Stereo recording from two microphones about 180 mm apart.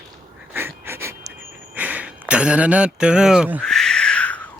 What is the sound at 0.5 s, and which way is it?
Pant, 10° right (ahead or behind).